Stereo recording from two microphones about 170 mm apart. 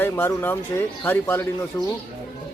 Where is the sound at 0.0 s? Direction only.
15° left (ahead or behind).